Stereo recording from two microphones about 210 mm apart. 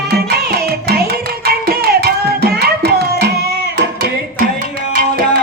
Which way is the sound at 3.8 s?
50° right (ahead or behind).